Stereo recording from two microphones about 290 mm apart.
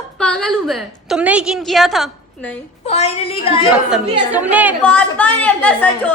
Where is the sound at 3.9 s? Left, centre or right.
Centre.